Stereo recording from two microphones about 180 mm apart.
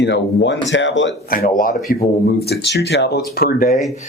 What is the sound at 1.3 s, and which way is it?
Speech, 50° left (ahead or behind).